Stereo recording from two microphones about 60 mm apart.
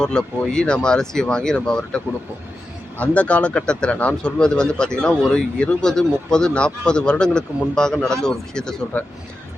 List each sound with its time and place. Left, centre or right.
0.0 s speech: centre
3.0 s speech: left
8.9 s speech: left